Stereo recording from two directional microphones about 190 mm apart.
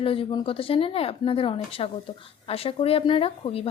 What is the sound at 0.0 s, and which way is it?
A woman's voice, 30° left (ahead or behind).